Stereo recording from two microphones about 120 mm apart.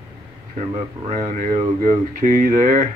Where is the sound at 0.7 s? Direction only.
75° right (ahead or behind).